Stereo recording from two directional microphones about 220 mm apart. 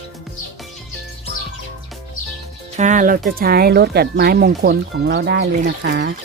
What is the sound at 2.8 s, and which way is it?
Speech, 35° right (ahead or behind).